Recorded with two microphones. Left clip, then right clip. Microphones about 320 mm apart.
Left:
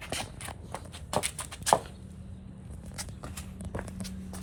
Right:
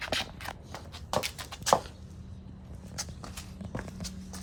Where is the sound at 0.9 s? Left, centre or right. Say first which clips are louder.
Right 1 dB; centre.